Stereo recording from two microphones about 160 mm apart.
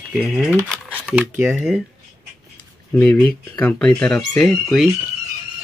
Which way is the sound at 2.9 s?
10° left (ahead or behind).